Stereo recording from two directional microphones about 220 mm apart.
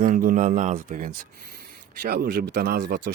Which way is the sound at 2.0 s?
45° right (ahead or behind).